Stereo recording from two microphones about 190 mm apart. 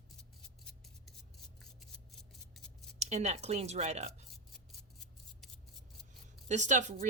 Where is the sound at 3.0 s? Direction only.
35° right (ahead or behind).